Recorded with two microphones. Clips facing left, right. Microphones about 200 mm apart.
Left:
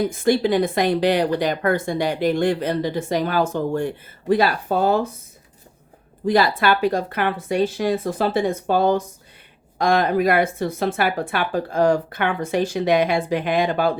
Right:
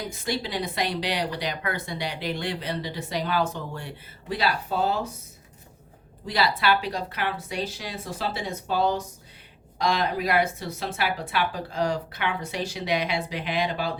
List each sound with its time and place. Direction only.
0.0 s speech: 50° left (ahead or behind)
6.2 s speech: 50° left (ahead or behind)